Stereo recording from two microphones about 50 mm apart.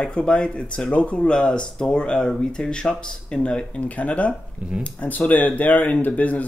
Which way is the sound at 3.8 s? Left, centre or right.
Left.